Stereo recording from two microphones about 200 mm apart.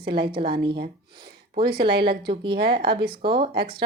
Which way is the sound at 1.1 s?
50° right (ahead or behind).